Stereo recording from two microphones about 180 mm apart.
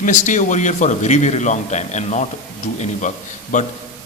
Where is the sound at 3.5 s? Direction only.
45° left (ahead or behind).